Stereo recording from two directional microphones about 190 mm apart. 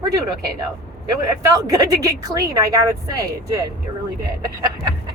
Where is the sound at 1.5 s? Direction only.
20° right (ahead or behind).